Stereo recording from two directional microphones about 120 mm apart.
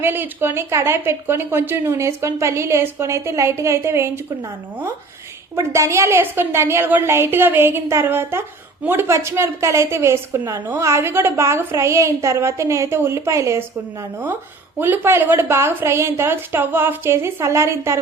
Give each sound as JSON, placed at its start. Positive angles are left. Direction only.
{"t": 0.0, "sound": "a woman's voice", "side_deg": -15}
{"t": 5.5, "sound": "a woman's voice", "side_deg": -25}
{"t": 14.8, "sound": "a woman's voice", "side_deg": -15}